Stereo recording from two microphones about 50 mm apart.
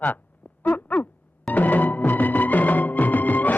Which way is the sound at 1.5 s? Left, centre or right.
Left.